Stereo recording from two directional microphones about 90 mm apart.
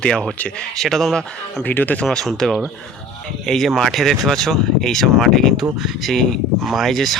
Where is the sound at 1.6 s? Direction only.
20° left (ahead or behind).